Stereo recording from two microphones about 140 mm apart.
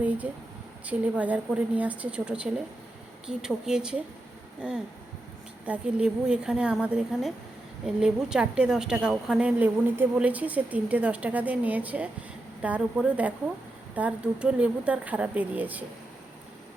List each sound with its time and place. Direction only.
0.2 s a woman's voice: 10° right (ahead or behind)
5.6 s a woman's voice: 10° right (ahead or behind)